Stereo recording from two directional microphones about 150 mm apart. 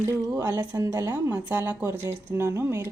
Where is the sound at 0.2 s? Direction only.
20° right (ahead or behind).